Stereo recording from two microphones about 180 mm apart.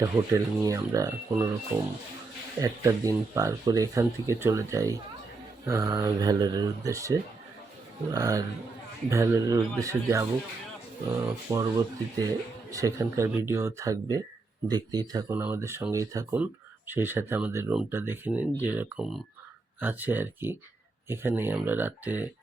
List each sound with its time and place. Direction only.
0.0 s speech: 20° right (ahead or behind)
1.7 s speech: 5° right (ahead or behind)
2.6 s speech: 20° right (ahead or behind)